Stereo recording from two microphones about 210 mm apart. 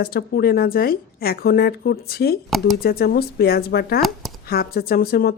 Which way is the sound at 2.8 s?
45° left (ahead or behind).